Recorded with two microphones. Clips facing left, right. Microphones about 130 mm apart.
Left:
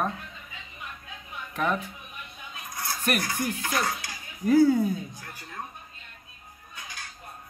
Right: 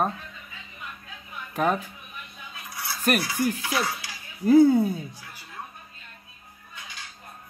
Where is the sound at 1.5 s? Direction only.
40° right (ahead or behind).